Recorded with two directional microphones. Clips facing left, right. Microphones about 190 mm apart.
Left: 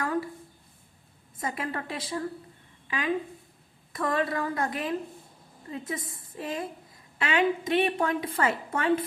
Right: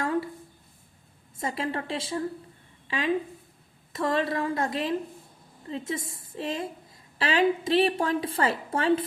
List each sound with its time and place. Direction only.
1.4 s a woman's voice: 30° right (ahead or behind)